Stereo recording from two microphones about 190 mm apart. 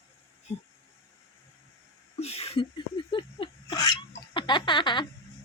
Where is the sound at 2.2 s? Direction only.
30° left (ahead or behind).